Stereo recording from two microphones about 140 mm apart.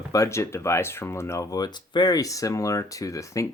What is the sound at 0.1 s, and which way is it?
Speech, 20° left (ahead or behind).